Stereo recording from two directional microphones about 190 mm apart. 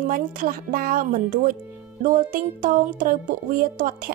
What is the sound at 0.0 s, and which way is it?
Speech, 45° right (ahead or behind).